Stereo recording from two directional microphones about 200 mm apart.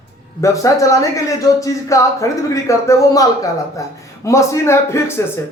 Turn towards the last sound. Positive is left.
turn(degrees=15)  # may be behind; listen again after turning